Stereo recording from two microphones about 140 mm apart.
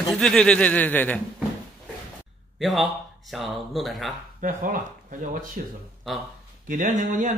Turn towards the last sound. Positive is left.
turn(degrees=-65)  # may be behind; listen again after turning